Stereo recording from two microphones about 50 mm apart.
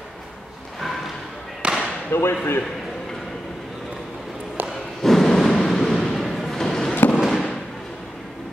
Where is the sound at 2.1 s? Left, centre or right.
Left.